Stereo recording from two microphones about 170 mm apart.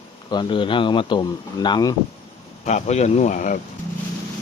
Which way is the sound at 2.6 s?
40° left (ahead or behind).